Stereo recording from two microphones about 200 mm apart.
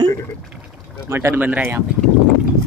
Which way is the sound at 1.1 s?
10° right (ahead or behind).